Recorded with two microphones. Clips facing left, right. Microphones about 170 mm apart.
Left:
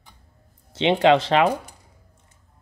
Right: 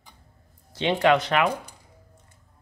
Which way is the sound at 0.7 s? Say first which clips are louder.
Left 4 dB; 20° left (ahead or behind).